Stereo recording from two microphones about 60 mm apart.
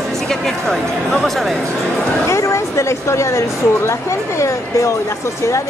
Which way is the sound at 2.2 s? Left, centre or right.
Left.